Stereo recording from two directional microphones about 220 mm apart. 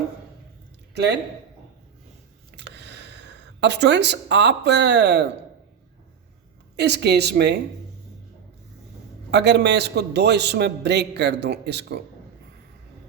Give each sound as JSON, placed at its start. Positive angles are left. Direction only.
{"t": 0.9, "sound": "a man's voice", "side_deg": -50}
{"t": 2.5, "sound": "a sound", "side_deg": -50}
{"t": 6.7, "sound": "a man's voice", "side_deg": -50}
{"t": 9.3, "sound": "a man's voice", "side_deg": -50}